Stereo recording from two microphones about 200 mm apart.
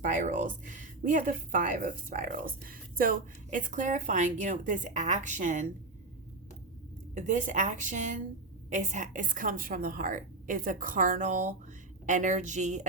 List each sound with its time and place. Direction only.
0.0 s speech: 40° right (ahead or behind)
7.1 s speech: 40° right (ahead or behind)